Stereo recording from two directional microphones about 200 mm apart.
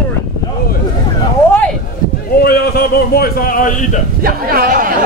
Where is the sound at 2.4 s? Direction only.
50° left (ahead or behind).